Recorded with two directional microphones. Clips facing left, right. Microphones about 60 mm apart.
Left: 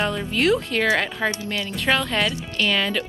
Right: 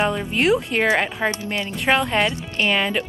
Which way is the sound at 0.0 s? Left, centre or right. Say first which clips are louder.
Right 3 dB; centre.